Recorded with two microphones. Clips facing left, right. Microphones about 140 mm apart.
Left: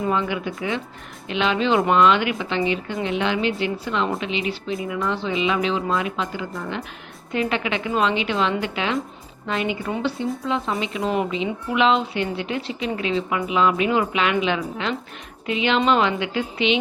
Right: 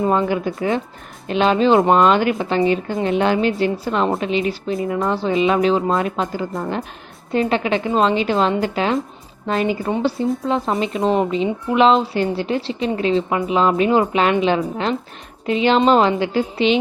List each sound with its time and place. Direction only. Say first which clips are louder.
0.1 s a woman's voice: right 5 dB; 40° right (ahead or behind)